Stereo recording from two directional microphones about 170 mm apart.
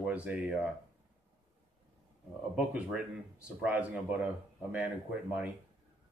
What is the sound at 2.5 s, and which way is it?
Speech, 5° right (ahead or behind).